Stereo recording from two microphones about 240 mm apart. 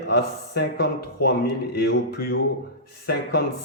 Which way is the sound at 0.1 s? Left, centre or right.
Left.